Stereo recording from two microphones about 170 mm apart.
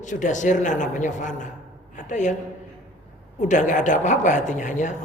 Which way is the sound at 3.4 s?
45° left (ahead or behind).